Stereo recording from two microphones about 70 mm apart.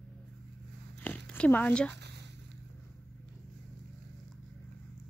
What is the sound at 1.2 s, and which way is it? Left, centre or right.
Speech, centre.